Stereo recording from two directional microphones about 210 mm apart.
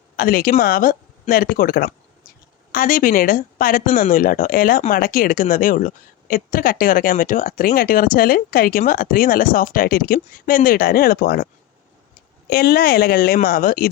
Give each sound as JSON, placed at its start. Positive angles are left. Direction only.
{"t": 0.2, "sound": "speech", "side_deg": 45}
{"t": 12.5, "sound": "speech", "side_deg": 45}